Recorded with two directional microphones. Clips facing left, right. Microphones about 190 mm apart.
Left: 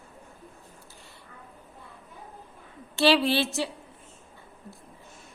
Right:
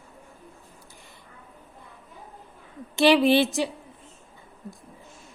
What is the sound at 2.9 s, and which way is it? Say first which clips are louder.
Speech: right 4 dB; 15° right (ahead or behind).